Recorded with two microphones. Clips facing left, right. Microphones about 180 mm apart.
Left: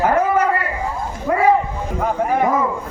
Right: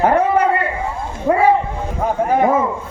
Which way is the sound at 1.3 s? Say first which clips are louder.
Right 4 dB; 25° right (ahead or behind).